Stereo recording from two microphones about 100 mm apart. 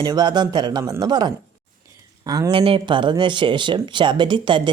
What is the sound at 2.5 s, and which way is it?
Speech, 70° right (ahead or behind).